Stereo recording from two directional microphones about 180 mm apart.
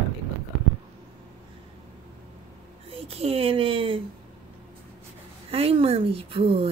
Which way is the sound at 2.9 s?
35° right (ahead or behind).